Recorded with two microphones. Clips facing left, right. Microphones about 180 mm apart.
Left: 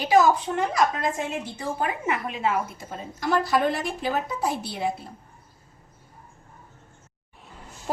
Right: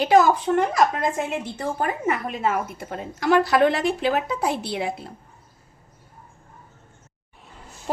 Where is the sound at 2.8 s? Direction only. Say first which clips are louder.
Right 4 dB; 65° right (ahead or behind).